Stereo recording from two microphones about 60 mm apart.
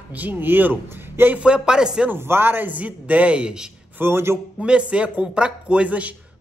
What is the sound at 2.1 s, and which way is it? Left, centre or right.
Speech, right.